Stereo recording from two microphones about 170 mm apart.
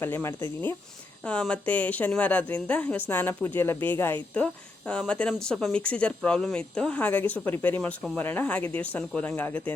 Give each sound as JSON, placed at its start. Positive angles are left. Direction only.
{"t": 0.0, "sound": "a woman's voice", "side_deg": 15}